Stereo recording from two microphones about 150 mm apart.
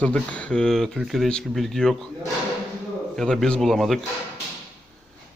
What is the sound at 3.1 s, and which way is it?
Speech, 5° left (ahead or behind).